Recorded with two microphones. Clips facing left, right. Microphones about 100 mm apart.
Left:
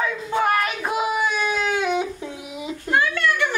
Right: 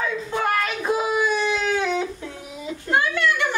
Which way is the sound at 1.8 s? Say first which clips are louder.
Left 1 dB; 15° left (ahead or behind).